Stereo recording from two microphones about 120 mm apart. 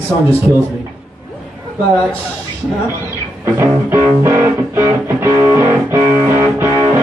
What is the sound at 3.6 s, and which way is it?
Music, 20° right (ahead or behind).